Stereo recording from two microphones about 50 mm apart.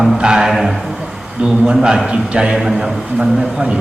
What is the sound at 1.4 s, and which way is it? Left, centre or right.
A man's voice, centre.